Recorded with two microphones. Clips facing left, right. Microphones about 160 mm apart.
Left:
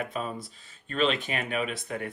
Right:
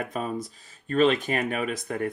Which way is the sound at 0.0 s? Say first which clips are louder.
Right 3 dB; 45° right (ahead or behind).